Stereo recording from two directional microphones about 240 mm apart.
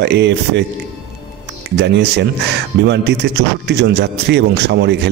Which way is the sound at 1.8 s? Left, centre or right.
Right.